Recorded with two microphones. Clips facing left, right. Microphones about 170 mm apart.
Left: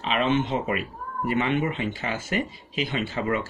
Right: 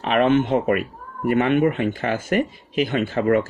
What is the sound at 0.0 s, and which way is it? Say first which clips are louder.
A man's voice: right 6 dB; 55° right (ahead or behind).